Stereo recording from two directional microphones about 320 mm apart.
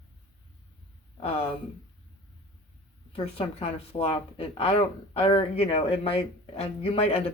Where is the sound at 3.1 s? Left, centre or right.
Centre.